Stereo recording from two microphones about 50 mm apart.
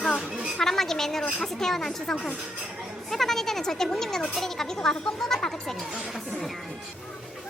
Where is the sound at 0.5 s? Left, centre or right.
Centre.